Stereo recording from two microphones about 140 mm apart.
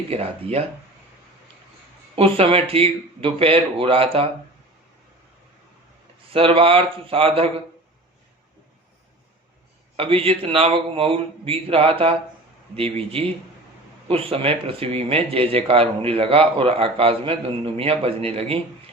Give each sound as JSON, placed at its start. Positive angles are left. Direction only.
{"t": 0.1, "sound": "speech", "side_deg": -45}
{"t": 2.1, "sound": "speech", "side_deg": -40}
{"t": 6.3, "sound": "speech", "side_deg": -40}
{"t": 10.0, "sound": "speech", "side_deg": -40}